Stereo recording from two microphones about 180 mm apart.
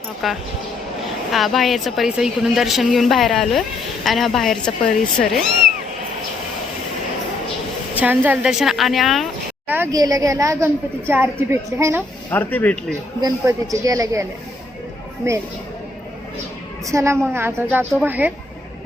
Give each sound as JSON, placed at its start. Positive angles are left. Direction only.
{"t": 0.2, "sound": "a woman's voice", "side_deg": 0}
{"t": 7.9, "sound": "a woman's voice", "side_deg": -10}
{"t": 9.7, "sound": "a woman's voice", "side_deg": -15}
{"t": 12.3, "sound": "speech", "side_deg": 10}
{"t": 13.2, "sound": "a woman's voice", "side_deg": -20}
{"t": 16.8, "sound": "a woman's voice", "side_deg": -15}